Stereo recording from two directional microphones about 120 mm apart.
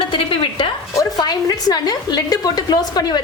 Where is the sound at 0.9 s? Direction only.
30° left (ahead or behind).